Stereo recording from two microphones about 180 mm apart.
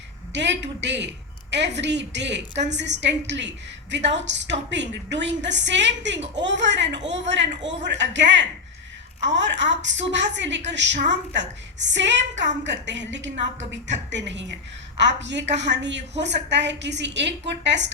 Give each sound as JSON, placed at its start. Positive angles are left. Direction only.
{"t": 0.3, "sound": "a woman's voice", "side_deg": -75}